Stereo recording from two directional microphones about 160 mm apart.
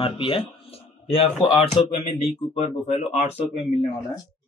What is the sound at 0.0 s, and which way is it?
Speech, 35° left (ahead or behind).